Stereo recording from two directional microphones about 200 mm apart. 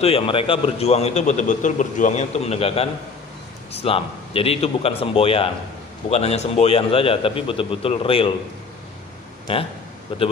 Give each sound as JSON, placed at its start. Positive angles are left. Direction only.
{"t": 0.0, "sound": "a man's voice", "side_deg": 30}